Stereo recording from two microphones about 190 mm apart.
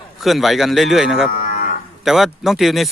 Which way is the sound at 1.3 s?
50° left (ahead or behind).